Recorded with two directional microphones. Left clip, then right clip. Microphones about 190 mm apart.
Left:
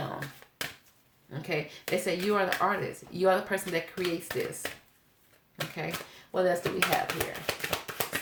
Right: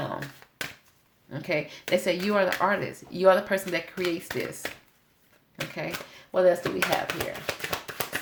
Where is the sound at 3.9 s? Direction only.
20° right (ahead or behind).